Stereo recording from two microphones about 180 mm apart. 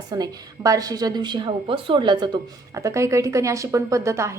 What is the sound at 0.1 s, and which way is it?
Speech, 20° right (ahead or behind).